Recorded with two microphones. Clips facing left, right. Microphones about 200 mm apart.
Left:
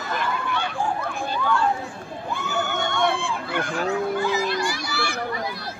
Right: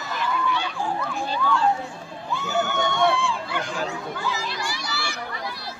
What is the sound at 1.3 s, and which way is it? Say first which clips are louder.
Children playing: even; 55° left (ahead or behind).